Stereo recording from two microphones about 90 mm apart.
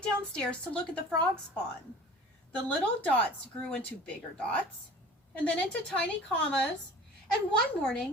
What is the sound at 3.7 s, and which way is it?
Speech, 15° left (ahead or behind).